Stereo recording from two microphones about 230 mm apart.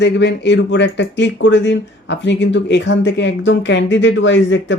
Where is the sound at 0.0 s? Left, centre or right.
Left.